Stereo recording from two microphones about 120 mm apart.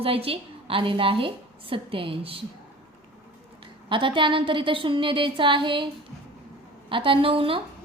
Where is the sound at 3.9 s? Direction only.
45° right (ahead or behind).